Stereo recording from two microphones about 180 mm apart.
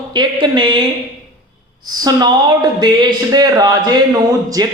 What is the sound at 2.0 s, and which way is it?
Speech, 20° right (ahead or behind).